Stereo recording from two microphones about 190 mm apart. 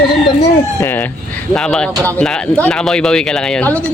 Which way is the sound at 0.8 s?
10° left (ahead or behind).